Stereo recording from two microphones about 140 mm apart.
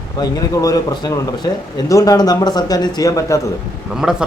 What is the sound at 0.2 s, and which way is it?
Speech, 25° left (ahead or behind).